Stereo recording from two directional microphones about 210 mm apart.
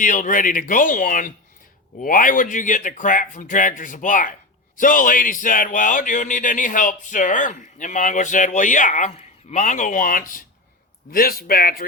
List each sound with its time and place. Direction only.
0.0 s speech: 40° left (ahead or behind)